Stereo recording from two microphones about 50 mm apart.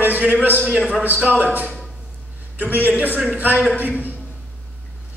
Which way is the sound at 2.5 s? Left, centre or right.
Right.